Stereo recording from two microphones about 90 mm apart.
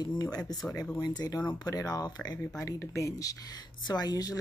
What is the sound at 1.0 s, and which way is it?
Speech, 50° left (ahead or behind).